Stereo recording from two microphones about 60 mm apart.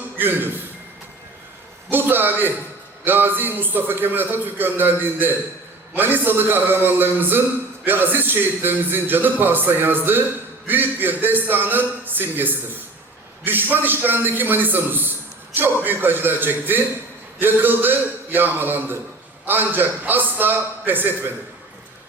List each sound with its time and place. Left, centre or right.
0.2 s a man's voice: right
1.9 s a man's voice: right